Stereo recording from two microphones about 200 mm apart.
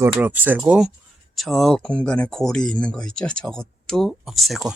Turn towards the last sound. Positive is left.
turn(degrees=0)  # may be behind; listen again after turning